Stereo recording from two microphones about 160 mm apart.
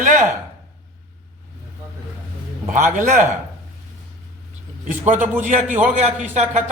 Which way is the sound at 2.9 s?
50° right (ahead or behind).